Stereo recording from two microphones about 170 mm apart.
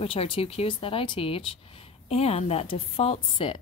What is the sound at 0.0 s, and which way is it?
A woman's voice, 35° left (ahead or behind).